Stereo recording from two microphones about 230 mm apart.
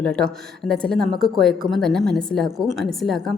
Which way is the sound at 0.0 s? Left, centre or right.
Centre.